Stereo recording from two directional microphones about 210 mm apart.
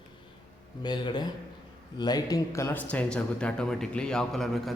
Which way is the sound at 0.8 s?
20° left (ahead or behind).